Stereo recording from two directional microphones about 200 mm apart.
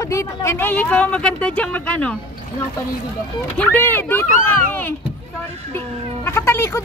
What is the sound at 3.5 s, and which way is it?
Speech, 10° left (ahead or behind).